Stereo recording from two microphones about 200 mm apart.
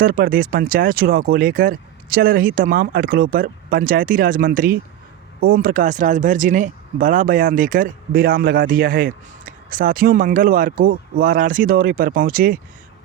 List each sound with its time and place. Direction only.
0.0 s speech: 45° right (ahead or behind)